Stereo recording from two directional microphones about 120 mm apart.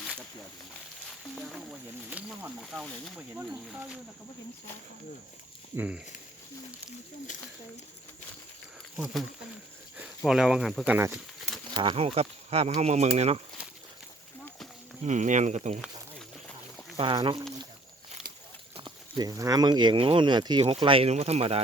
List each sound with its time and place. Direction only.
1.4 s snake: centre (ahead or behind)
2.0 s speech: 15° right (ahead or behind)
2.6 s speech: centre (ahead or behind)
5.7 s speech: 15° right (ahead or behind)
10.2 s speech: 5° right (ahead or behind)
11.7 s speech: 40° right (ahead or behind)
11.9 s speech: 55° right (ahead or behind)
15.0 s speech: 90° right; by 15.8 s 70° right (ahead or behind)
17.0 s speech: 45° right (ahead or behind)
18.8 s speech: 40° right (ahead or behind)
20.8 s speech: 50° right (ahead or behind)